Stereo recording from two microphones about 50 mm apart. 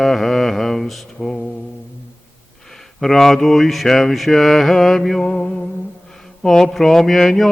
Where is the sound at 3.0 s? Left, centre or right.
Centre.